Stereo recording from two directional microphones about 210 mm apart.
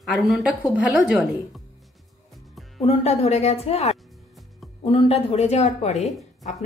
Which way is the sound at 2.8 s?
30° left (ahead or behind).